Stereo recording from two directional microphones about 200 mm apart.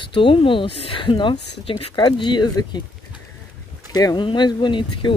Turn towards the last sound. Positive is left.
turn(degrees=25)  # may be behind; listen again after turning